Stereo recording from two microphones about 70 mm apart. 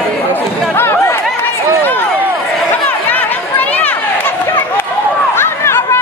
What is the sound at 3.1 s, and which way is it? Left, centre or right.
Chatter, left.